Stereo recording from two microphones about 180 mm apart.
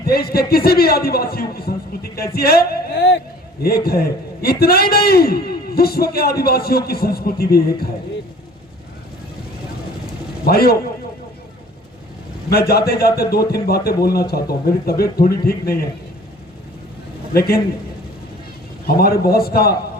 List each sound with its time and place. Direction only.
0.1 s a man's voice: 60° left (ahead or behind)
10.4 s a man's voice: 60° left (ahead or behind)
12.5 s a man's voice: 60° left (ahead or behind)
17.3 s a man's voice: 60° left (ahead or behind)
18.9 s a man's voice: 60° left (ahead or behind)